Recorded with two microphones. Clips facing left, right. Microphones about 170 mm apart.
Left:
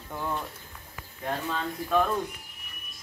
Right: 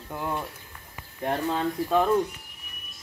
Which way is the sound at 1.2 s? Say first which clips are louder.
Right 5 dB; 35° right (ahead or behind).